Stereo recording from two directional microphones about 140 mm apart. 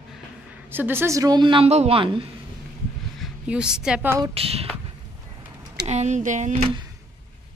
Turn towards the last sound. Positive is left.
turn(degrees=-60)  # may be behind; listen again after turning